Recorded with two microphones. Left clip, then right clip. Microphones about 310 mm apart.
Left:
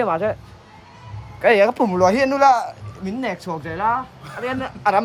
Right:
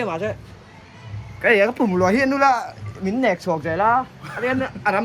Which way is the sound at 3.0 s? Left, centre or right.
Centre.